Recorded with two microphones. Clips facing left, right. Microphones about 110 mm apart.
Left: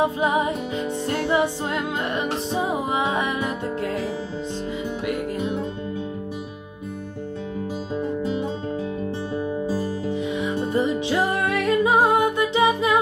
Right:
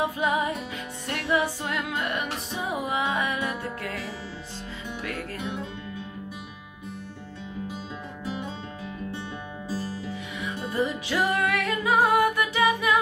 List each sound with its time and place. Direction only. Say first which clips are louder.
0.0 s music: left 4 dB; 20° left (ahead or behind)
10.1 s music: left 10 dB; 25° left (ahead or behind)